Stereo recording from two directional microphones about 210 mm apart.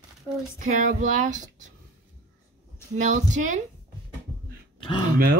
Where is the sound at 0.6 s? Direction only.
35° right (ahead or behind).